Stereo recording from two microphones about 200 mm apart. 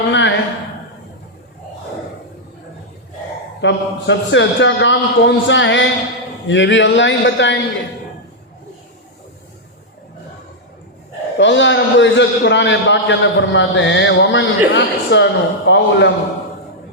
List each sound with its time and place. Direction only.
0.1 s a sound: 65° left (ahead or behind)
3.6 s a man's voice: 65° left (ahead or behind)
11.3 s a man's voice: 65° left (ahead or behind)